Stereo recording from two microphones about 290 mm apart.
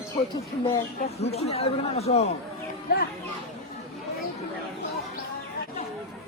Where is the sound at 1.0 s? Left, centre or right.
Left.